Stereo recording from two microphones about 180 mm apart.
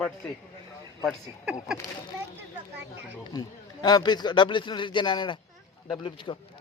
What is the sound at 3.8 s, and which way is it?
A man's voice, 25° left (ahead or behind).